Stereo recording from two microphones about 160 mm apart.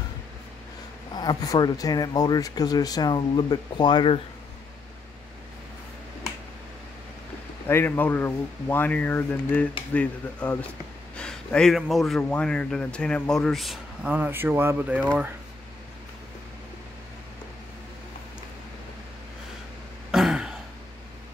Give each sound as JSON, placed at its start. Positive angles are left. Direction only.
{"t": 1.1, "sound": "speech", "side_deg": 25}
{"t": 7.6, "sound": "a man's voice", "side_deg": 15}
{"t": 20.1, "sound": "throat clearing", "side_deg": -5}